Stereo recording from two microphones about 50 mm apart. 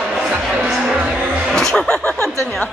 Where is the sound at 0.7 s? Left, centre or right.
Centre.